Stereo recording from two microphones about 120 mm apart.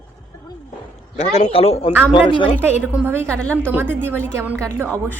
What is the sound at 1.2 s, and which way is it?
Speech, 60° left (ahead or behind).